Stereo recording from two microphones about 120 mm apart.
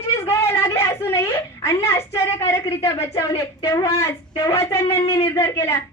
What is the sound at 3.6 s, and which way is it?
A woman's voice, 25° left (ahead or behind).